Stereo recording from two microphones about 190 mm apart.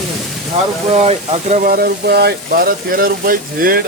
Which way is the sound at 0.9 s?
35° right (ahead or behind).